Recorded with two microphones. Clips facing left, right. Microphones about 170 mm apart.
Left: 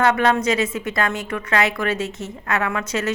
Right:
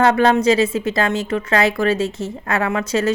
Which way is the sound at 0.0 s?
30° right (ahead or behind).